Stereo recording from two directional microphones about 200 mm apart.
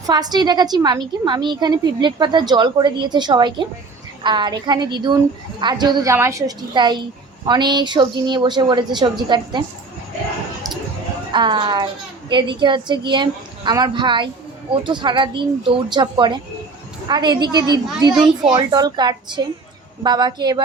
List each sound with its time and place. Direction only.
0.0 s a woman's voice: 20° right (ahead or behind)
11.3 s a woman's voice: 25° right (ahead or behind)